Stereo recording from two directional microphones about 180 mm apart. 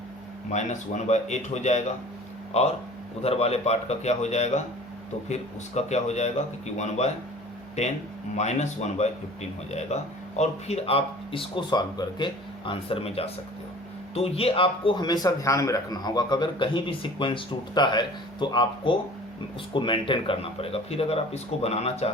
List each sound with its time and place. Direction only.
0.5 s speech: 40° left (ahead or behind)
8.4 s a man's voice: 40° left (ahead or behind)